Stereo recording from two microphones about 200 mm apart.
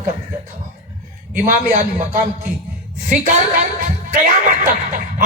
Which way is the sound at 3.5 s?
40° right (ahead or behind).